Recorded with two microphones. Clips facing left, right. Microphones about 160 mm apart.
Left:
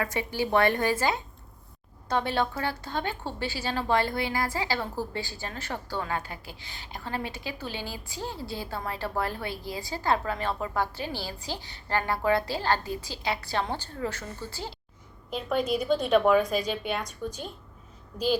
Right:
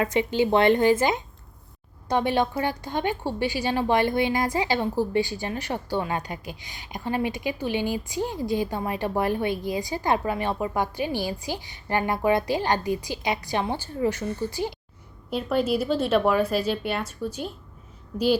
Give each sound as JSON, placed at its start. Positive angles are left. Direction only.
{"t": 0.0, "sound": "a woman's voice", "side_deg": -20}